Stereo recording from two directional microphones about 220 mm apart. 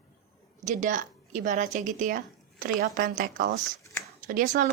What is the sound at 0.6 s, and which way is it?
A woman's voice, 35° right (ahead or behind).